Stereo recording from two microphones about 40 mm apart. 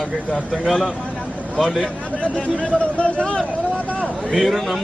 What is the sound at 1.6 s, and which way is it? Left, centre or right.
Speech, centre.